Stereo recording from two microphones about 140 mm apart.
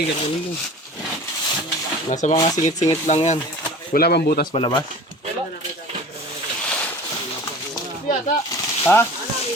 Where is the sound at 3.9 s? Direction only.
90° left.